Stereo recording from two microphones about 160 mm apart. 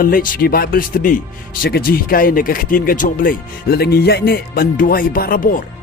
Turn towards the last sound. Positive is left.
turn(degrees=60)  # may be behind; listen again after turning